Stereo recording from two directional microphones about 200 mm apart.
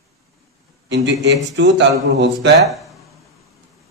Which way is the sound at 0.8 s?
60° right (ahead or behind).